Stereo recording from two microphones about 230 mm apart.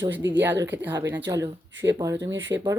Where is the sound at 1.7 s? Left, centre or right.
Right.